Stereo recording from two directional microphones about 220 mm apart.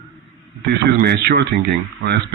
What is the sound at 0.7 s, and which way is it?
Speech, 45° right (ahead or behind).